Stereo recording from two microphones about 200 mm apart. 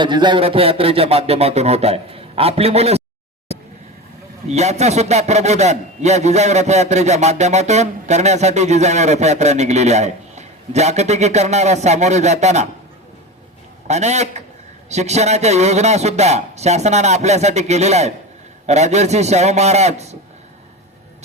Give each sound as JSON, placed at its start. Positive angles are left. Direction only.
{"t": 0.0, "sound": "speech", "side_deg": -25}
{"t": 4.4, "sound": "a man's voice", "side_deg": -35}
{"t": 13.8, "sound": "a man's voice", "side_deg": -35}